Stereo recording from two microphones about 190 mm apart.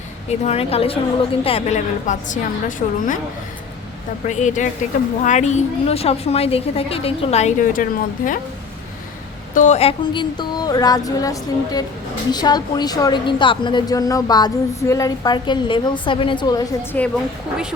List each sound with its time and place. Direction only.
0.3 s a woman's voice: 35° left (ahead or behind)
4.3 s a woman's voice: 40° left (ahead or behind)
9.6 s a woman's voice: 35° left (ahead or behind)
16.9 s a woman's voice: 5° left (ahead or behind)